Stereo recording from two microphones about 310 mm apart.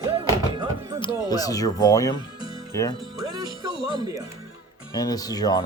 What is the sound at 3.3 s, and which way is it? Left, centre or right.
Music, centre.